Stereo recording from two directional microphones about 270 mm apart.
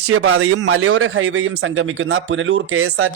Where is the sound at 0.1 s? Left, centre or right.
Right.